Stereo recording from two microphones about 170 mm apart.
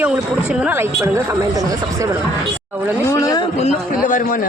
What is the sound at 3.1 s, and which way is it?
Speech, 20° left (ahead or behind).